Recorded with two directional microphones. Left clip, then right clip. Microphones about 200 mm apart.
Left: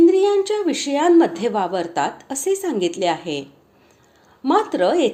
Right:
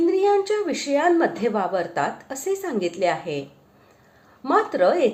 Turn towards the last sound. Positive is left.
turn(degrees=30)  # may be behind; listen again after turning